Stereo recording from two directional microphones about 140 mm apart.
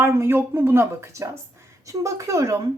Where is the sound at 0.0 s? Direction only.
15° right (ahead or behind).